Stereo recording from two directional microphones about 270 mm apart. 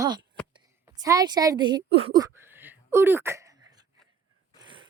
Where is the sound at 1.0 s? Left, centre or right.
Centre.